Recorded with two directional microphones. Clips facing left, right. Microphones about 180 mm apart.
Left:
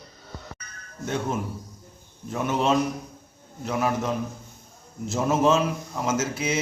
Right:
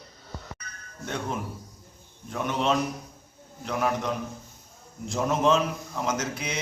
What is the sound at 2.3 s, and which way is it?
A man's voice, 5° left (ahead or behind).